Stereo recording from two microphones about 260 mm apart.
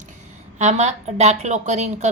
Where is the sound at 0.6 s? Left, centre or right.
Right.